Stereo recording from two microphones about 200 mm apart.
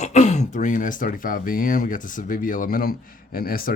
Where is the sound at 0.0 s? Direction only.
35° left (ahead or behind).